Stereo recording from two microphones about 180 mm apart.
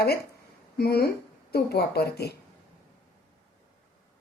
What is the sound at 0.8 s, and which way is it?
A woman's voice, 60° left (ahead or behind).